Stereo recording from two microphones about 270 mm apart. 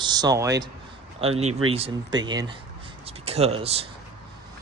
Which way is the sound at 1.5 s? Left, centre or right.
Right.